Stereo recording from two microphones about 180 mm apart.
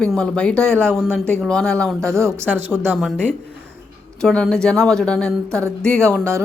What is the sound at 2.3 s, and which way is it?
Speech, 15° right (ahead or behind).